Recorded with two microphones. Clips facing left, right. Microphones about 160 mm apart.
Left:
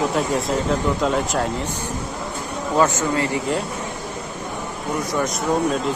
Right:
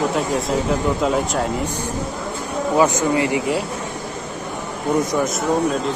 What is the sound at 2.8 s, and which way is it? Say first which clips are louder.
Speech: right 2 dB; 15° right (ahead or behind).